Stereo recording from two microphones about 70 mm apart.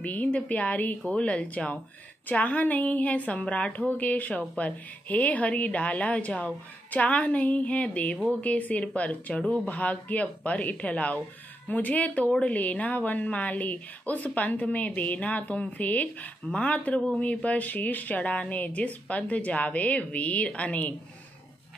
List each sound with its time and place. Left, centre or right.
0.0 s a woman's voice: left